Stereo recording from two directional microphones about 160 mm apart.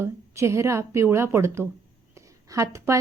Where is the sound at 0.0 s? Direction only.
15° right (ahead or behind).